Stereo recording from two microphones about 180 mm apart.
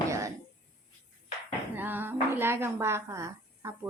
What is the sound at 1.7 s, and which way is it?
A woman's voice, 10° right (ahead or behind).